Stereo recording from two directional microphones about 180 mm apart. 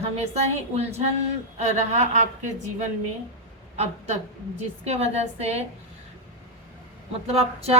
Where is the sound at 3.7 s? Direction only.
40° right (ahead or behind).